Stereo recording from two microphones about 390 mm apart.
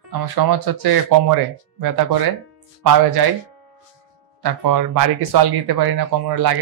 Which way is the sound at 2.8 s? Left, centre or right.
Right.